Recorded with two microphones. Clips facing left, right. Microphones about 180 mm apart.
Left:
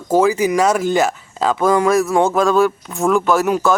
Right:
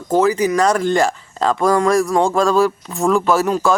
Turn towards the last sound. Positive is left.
turn(degrees=0)  # may be behind; listen again after turning